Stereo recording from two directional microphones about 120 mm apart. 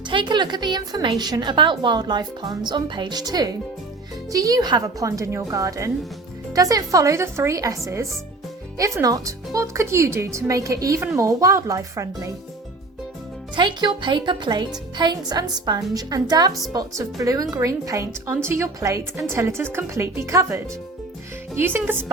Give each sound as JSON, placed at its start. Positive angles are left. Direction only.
{"t": 0.1, "sound": "a woman's voice", "side_deg": -40}
{"t": 8.8, "sound": "speech", "side_deg": -30}
{"t": 13.6, "sound": "a woman's voice", "side_deg": -40}